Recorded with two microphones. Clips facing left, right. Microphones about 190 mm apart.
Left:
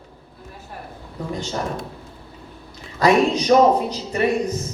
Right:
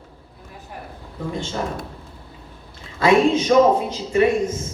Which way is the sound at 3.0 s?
40° left (ahead or behind).